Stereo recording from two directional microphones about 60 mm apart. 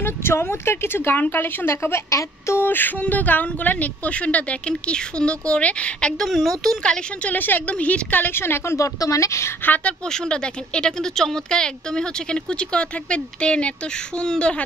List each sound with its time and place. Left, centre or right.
0.0 s a woman's voice: left
2.0 s a sound: left
3.0 s speech: left
6.2 s speech: centre
7.2 s a woman's voice: left
8.7 s speech: left
10.0 s speech: centre